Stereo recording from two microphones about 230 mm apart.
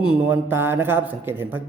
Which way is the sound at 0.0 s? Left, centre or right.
Centre.